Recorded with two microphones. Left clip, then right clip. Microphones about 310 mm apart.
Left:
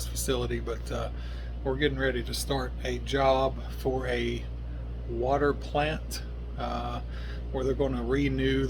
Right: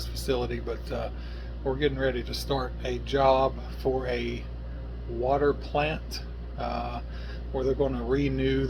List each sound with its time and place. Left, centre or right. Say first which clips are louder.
0.3 s speech: right 2 dB; centre